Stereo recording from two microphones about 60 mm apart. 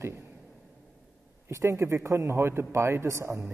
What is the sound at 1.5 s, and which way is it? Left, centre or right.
A man's voice, right.